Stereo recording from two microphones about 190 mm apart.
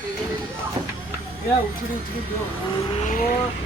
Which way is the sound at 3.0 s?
45° left (ahead or behind).